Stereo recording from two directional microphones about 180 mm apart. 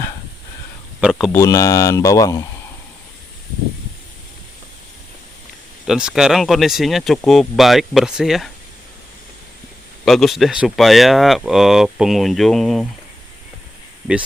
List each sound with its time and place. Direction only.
1.3 s speech: 15° left (ahead or behind)
5.9 s speech: 5° right (ahead or behind)
10.1 s speech: centre (ahead or behind)